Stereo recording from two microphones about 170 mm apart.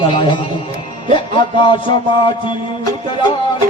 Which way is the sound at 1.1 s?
30° left (ahead or behind).